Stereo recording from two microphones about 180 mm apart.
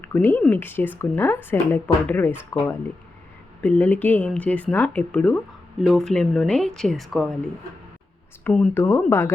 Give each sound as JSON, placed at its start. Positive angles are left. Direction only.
{"t": 0.0, "sound": "speech", "side_deg": 10}
{"t": 8.4, "sound": "speech", "side_deg": 10}